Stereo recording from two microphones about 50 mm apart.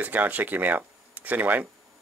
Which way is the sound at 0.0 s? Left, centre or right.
Right.